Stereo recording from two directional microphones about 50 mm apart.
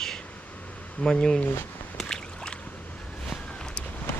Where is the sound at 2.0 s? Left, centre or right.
Centre.